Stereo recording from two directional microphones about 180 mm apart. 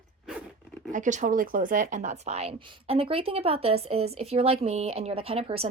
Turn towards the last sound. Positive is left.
turn(degrees=-30)  # may be behind; listen again after turning